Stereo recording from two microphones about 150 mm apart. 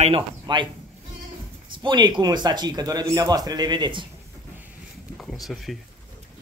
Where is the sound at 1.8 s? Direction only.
30° right (ahead or behind).